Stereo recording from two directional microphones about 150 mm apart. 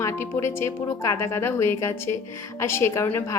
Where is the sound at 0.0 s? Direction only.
20° left (ahead or behind).